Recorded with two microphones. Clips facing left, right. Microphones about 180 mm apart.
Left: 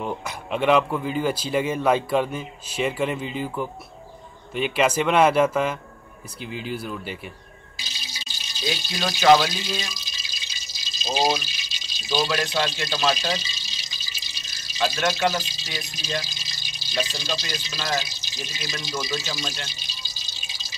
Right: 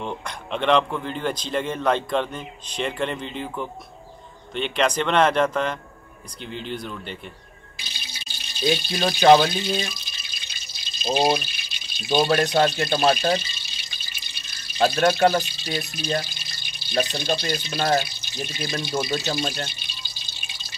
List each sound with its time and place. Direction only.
0.0 s speech: 5° left (ahead or behind)
7.7 s a sound: 55° right (ahead or behind)
9.4 s speech: 55° right (ahead or behind)
19.7 s drip: 60° right (ahead or behind)